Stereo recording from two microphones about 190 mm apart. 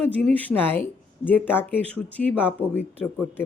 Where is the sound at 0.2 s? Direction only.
5° left (ahead or behind).